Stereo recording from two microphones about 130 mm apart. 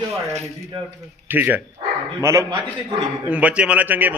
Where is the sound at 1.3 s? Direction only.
15° right (ahead or behind).